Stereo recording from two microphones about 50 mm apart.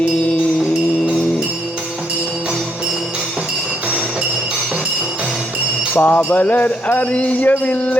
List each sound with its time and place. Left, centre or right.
5.9 s jingle bell: left
6.3 s music: left